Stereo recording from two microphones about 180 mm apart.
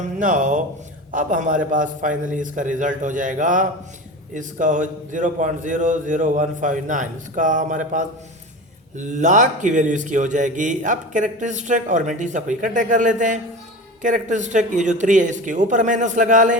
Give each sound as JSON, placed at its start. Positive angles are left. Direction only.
{"t": 0.0, "sound": "speech", "side_deg": -45}